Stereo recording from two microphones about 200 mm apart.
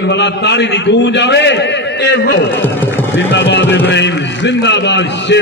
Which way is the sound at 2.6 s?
10° left (ahead or behind).